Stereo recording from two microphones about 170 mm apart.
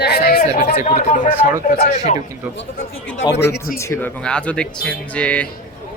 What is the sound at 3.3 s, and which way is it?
Speech, 85° left.